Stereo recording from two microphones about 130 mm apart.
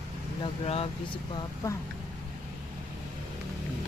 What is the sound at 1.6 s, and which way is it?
Speech, 20° left (ahead or behind).